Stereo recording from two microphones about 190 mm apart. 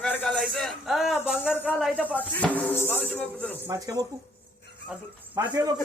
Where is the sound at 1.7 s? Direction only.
5° left (ahead or behind).